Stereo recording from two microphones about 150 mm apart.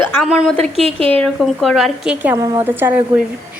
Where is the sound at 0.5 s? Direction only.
40° right (ahead or behind).